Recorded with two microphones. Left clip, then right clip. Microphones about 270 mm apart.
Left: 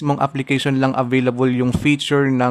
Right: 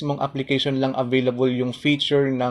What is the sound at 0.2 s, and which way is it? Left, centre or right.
Speech, left.